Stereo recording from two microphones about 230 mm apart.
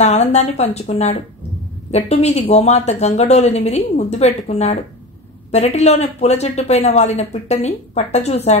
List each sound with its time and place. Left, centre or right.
0.0 s a woman's voice: left